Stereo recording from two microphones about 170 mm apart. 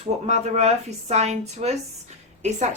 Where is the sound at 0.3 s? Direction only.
40° right (ahead or behind).